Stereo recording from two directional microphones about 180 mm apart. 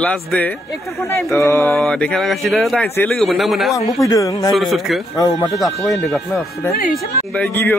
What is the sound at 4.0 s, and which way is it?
Speech, 20° left (ahead or behind).